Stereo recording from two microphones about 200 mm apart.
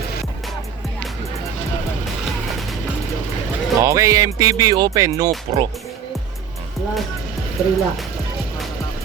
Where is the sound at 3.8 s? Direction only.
15° right (ahead or behind).